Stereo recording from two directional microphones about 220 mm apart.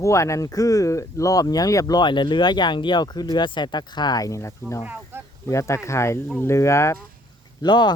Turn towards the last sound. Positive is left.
turn(degrees=20)  # may be behind; listen again after turning